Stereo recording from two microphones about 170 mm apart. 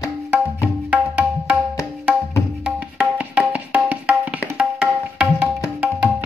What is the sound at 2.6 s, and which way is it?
Music, 5° right (ahead or behind).